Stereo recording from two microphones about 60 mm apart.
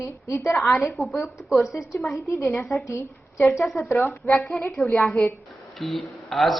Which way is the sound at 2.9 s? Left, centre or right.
Left.